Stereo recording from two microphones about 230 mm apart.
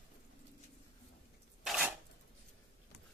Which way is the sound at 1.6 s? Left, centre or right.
Centre.